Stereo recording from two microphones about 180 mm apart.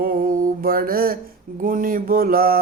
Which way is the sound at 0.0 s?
50° right (ahead or behind).